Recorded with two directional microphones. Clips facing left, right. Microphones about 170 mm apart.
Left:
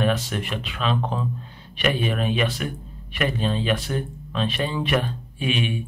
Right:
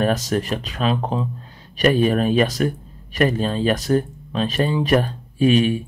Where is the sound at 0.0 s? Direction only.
40° right (ahead or behind).